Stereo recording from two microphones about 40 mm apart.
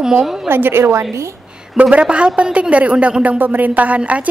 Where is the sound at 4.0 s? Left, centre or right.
Right.